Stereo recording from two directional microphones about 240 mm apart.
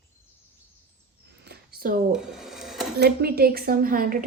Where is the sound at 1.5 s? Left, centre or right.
Right.